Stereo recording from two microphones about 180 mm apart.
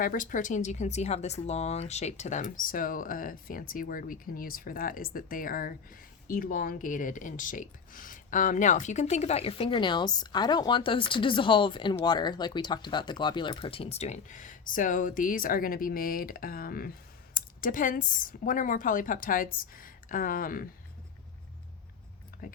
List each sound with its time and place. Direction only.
0.0 s speech: 50° left (ahead or behind)